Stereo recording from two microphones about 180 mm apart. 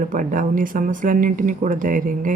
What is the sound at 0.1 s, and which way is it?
Speech, 45° right (ahead or behind).